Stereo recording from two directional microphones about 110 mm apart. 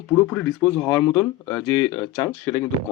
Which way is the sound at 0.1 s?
15° left (ahead or behind).